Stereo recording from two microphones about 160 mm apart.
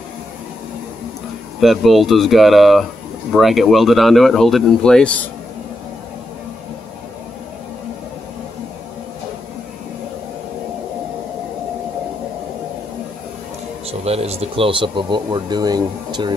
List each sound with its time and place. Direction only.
1.6 s speech: centre (ahead or behind)
13.8 s speech: 40° right (ahead or behind)